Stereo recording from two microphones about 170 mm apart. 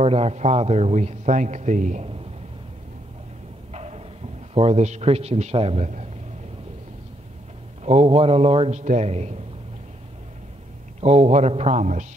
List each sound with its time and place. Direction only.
0.0 s a man's voice: 35° right (ahead or behind)
3.7 s a sound: 40° right (ahead or behind)
4.6 s a man's voice: 40° right (ahead or behind)
7.8 s a man's voice: 35° right (ahead or behind)
11.0 s a man's voice: 40° right (ahead or behind)